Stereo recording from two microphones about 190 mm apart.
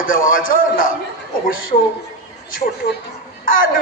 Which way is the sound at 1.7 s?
30° left (ahead or behind).